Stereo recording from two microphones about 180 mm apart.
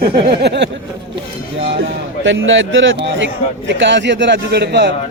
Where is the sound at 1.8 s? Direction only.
90° right.